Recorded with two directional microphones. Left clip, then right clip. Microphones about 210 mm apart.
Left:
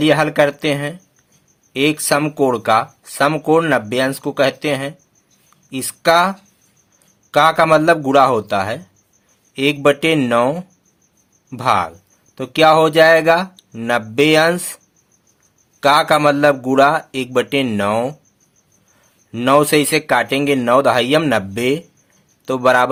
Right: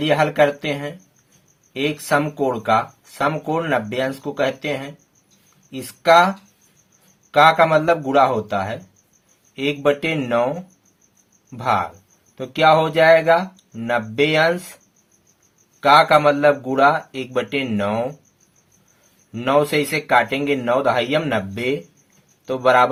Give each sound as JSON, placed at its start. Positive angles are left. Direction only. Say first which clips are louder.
{"t": 0.0, "sound": "speech", "louder": "left 3 dB", "side_deg": 45}
{"t": 11.5, "sound": "speech", "louder": "left 4 dB", "side_deg": 40}
{"t": 15.8, "sound": "speech", "louder": "even", "side_deg": 40}
{"t": 19.3, "sound": "speech", "louder": "left 5 dB", "side_deg": 40}